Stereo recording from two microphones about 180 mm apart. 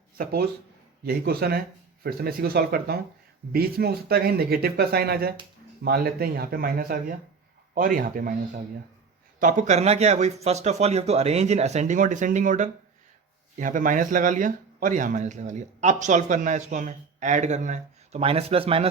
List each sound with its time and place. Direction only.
0.2 s speech: 55° right (ahead or behind); by 18.9 s 30° right (ahead or behind)